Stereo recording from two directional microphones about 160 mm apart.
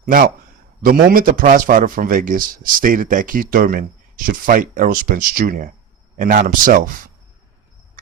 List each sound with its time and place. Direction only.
0.0 s a man's voice: 60° right (ahead or behind)